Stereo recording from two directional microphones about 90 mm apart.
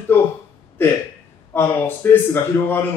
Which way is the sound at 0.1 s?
25° left (ahead or behind).